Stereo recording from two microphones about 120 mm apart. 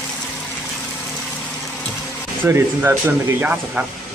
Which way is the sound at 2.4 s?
20° right (ahead or behind).